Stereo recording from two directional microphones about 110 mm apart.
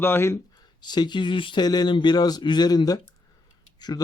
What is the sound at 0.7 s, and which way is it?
A man's voice, 40° left (ahead or behind).